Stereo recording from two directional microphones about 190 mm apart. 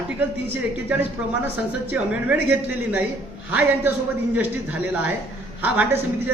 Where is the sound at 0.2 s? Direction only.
10° right (ahead or behind).